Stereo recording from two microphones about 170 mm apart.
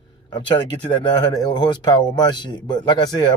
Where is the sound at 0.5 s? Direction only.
25° left (ahead or behind).